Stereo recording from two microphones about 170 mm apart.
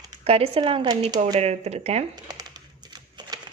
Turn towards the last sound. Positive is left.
turn(degrees=-25)  # may be behind; listen again after turning